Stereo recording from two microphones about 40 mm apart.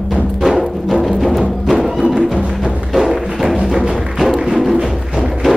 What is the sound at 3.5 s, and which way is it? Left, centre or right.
Music, right.